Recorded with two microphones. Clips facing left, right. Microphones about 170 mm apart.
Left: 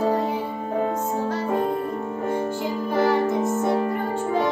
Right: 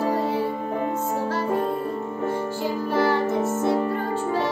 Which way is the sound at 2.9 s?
15° left (ahead or behind).